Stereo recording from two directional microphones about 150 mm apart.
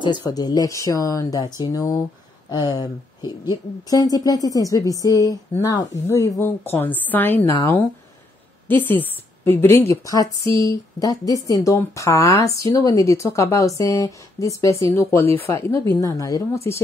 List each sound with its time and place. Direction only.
0.0 s a woman's voice: 30° left (ahead or behind)